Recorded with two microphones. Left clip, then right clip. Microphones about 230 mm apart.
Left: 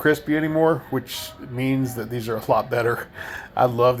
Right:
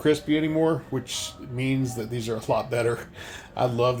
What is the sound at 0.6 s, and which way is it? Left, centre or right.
Speech, centre.